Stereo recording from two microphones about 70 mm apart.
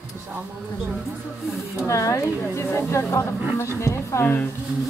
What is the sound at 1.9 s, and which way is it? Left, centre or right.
Speech, left.